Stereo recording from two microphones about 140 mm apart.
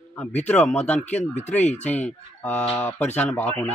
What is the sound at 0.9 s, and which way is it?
Speech, 55° left (ahead or behind).